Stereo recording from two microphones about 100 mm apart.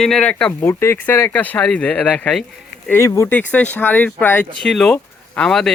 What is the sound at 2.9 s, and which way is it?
Speech, 30° left (ahead or behind).